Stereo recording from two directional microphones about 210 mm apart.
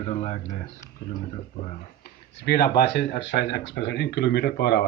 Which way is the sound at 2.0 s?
50° left (ahead or behind).